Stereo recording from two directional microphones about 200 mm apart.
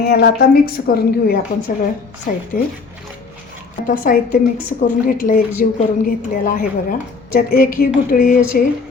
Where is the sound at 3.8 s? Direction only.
40° left (ahead or behind).